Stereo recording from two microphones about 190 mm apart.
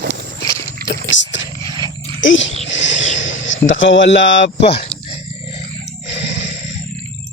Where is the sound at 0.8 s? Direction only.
55° right (ahead or behind).